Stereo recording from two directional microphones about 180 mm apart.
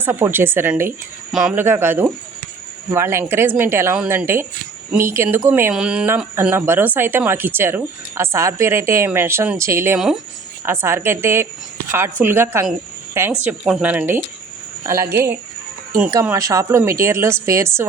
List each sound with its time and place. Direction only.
0.0 s speech: 10° right (ahead or behind)